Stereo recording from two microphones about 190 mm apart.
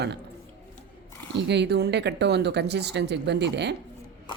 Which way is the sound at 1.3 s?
65° right (ahead or behind).